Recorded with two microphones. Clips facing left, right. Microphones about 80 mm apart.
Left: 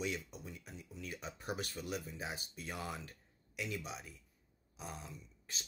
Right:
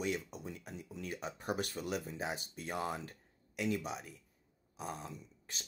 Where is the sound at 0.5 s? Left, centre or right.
Right.